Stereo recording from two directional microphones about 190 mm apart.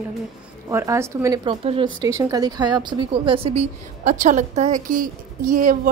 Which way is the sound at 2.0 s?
20° right (ahead or behind).